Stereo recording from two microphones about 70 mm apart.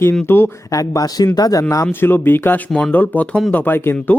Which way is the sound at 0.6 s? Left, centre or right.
Left.